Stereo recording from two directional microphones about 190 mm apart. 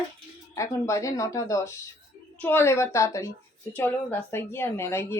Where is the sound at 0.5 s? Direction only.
15° left (ahead or behind).